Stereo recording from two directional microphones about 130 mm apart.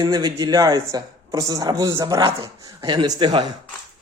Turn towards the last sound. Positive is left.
turn(degrees=-35)  # may be behind; listen again after turning